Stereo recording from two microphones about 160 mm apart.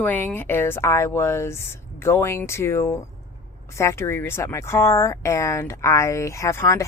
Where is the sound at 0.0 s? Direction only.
10° left (ahead or behind).